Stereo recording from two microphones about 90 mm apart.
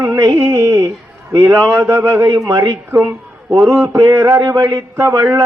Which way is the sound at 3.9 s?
40° right (ahead or behind).